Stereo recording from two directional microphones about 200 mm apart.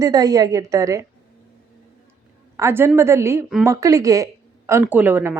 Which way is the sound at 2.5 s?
10° right (ahead or behind).